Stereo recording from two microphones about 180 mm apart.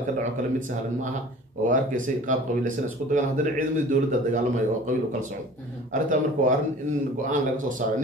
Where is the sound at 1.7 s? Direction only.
45° right (ahead or behind).